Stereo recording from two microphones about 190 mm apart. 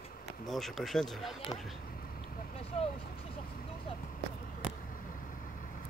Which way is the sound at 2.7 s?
30° left (ahead or behind).